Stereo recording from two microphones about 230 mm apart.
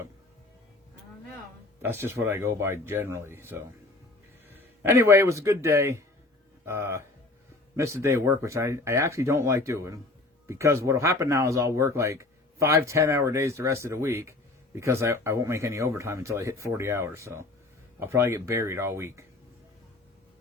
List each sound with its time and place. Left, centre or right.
1.8 s speech: centre